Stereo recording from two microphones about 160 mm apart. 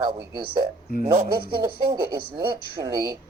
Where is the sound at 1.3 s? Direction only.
70° right (ahead or behind).